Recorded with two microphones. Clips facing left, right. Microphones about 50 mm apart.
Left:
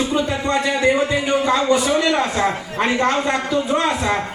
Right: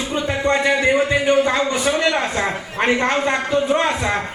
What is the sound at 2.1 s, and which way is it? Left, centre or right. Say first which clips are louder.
Speech: left 2 dB; centre.